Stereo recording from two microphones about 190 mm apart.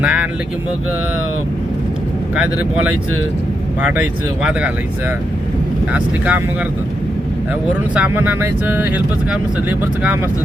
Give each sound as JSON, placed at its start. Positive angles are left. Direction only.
{"t": 0.0, "sound": "vehicle", "side_deg": -5}
{"t": 2.3, "sound": "speech", "side_deg": -5}
{"t": 5.9, "sound": "speech", "side_deg": -5}
{"t": 7.9, "sound": "speech", "side_deg": -10}